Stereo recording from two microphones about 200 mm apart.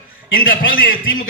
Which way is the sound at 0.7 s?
45° left (ahead or behind).